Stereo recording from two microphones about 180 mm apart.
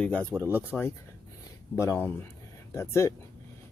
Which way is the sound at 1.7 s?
15° left (ahead or behind).